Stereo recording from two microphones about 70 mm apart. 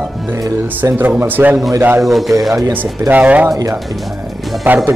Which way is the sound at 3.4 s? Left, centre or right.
Right.